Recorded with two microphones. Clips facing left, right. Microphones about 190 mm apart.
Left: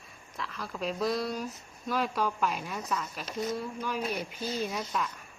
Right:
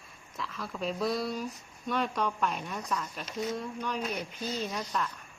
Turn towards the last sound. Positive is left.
turn(degrees=5)  # may be behind; listen again after turning